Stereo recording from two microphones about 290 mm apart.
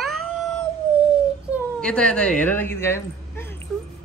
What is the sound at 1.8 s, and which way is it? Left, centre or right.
Speech, centre.